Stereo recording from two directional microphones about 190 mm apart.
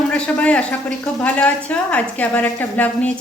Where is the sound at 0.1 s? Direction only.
5° left (ahead or behind).